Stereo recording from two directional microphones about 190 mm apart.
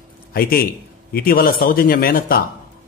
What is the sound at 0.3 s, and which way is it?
A man's voice, 50° left (ahead or behind).